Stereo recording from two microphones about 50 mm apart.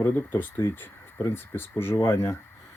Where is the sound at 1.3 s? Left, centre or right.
Left.